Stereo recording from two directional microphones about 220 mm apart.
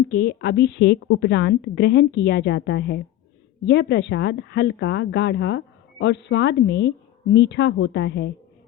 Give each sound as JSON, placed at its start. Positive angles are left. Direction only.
{"t": 0.1, "sound": "a woman's voice", "side_deg": 45}